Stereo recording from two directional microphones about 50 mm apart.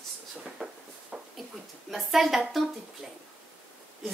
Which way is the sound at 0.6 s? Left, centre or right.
Right.